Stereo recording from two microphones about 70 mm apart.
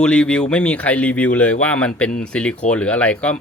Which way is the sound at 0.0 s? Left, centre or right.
Centre.